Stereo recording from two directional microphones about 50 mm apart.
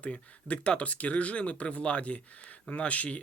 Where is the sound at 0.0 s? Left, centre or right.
Left.